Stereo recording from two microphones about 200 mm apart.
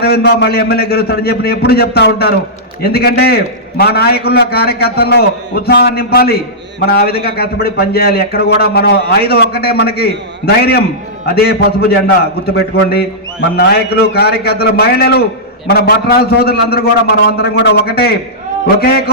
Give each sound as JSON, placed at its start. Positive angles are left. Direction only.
{"t": 0.0, "sound": "a man's voice", "side_deg": 55}
{"t": 13.6, "sound": "a man's voice", "side_deg": 50}